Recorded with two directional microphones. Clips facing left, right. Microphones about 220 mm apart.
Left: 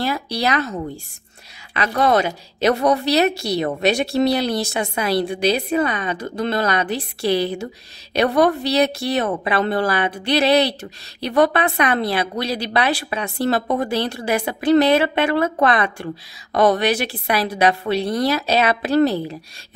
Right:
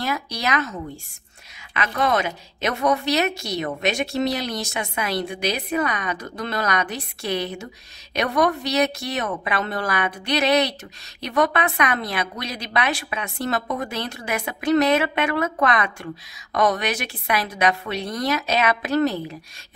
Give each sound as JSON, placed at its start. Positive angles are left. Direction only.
{"t": 0.0, "sound": "a woman's voice", "side_deg": 30}